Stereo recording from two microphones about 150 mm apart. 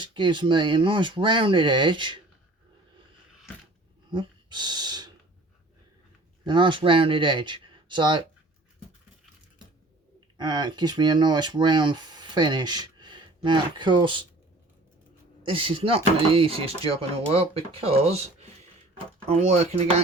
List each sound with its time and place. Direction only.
0.0 s speech: 30° right (ahead or behind)
4.1 s speech: 30° right (ahead or behind)
6.4 s speech: 30° right (ahead or behind)
10.3 s speech: 30° right (ahead or behind)
15.4 s speech: 35° right (ahead or behind)
19.3 s speech: 50° right (ahead or behind)